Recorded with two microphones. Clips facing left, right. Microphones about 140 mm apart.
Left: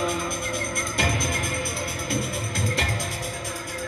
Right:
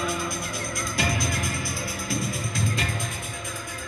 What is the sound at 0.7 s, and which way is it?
Music, 55° left (ahead or behind).